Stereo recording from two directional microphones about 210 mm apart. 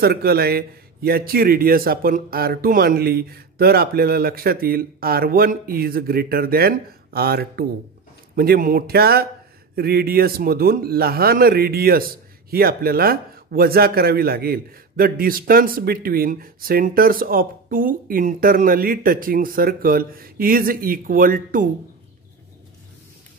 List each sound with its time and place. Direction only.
0.0 s a man's voice: 50° right (ahead or behind)